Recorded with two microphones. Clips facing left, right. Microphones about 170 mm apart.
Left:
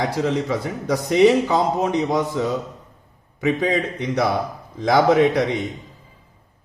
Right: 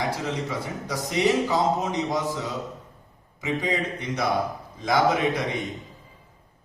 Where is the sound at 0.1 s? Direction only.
65° left (ahead or behind).